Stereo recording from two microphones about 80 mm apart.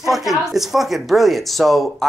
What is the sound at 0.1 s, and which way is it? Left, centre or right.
Speech, centre.